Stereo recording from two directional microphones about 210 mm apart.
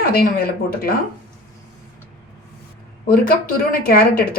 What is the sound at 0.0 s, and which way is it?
Speech, 45° left (ahead or behind).